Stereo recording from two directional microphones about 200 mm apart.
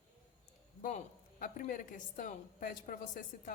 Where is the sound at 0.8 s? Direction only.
40° left (ahead or behind).